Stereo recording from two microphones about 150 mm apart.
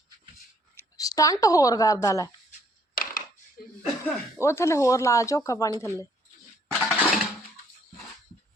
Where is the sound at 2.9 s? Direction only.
70° left (ahead or behind).